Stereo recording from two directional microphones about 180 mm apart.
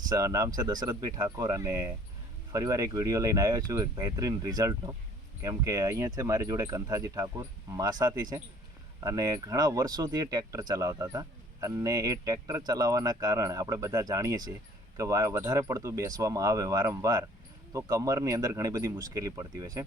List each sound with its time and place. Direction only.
0.1 s speech: 20° right (ahead or behind)